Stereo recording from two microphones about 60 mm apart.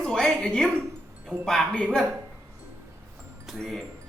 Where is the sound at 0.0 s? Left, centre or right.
Centre.